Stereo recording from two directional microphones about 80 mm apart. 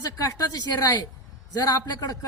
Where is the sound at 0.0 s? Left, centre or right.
Left.